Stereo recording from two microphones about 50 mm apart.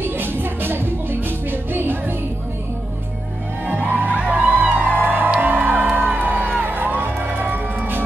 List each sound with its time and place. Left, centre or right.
0.0 s music: right
3.6 s music: right